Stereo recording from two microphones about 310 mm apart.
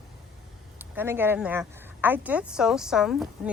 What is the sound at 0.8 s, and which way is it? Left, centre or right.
Speech, centre.